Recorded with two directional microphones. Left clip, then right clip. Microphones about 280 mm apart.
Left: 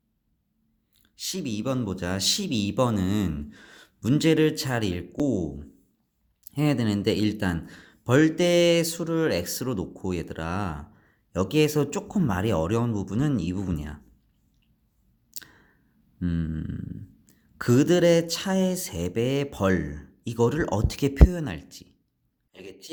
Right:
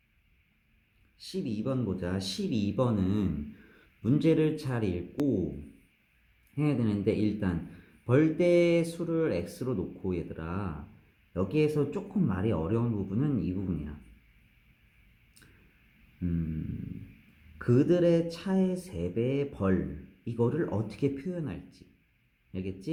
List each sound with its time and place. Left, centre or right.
1.1 s a man's voice: left
6.6 s a man's voice: left
17.6 s a man's voice: left